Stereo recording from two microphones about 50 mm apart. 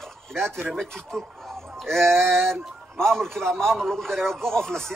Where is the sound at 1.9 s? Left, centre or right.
Centre.